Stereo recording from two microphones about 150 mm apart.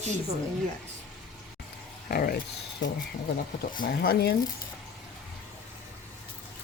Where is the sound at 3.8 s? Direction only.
90° left.